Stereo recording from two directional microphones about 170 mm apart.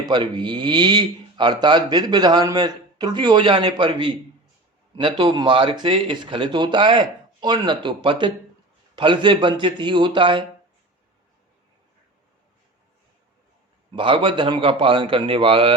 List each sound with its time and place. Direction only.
0.0 s speech: 25° right (ahead or behind)
13.9 s a man's voice: 30° right (ahead or behind)